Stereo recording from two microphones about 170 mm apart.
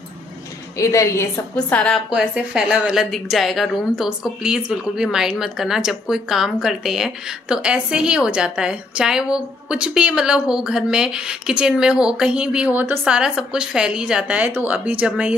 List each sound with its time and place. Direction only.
0.7 s a woman's voice: 20° left (ahead or behind)
2.0 s a woman's voice: 5° right (ahead or behind)